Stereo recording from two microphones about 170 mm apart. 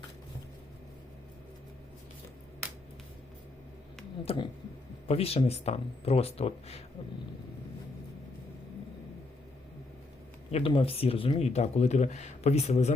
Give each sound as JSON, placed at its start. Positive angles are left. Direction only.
{"t": 4.3, "sound": "speech", "side_deg": 35}
{"t": 10.5, "sound": "speech", "side_deg": 35}